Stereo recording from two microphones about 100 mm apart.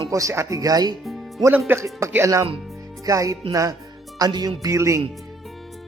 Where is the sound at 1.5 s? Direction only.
20° right (ahead or behind).